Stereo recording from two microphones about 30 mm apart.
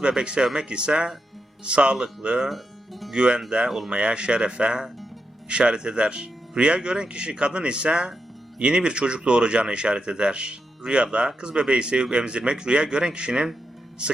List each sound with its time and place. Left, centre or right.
0.2 s speech: right
2.5 s music: centre
3.1 s speech: right